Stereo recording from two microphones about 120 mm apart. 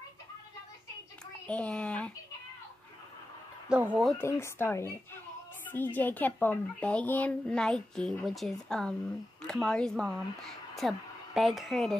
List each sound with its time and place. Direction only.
1.5 s a child's voice: 10° left (ahead or behind)
3.7 s speech: 5° right (ahead or behind)
4.2 s a child's voice: 20° left (ahead or behind); by 12.0 s centre (ahead or behind)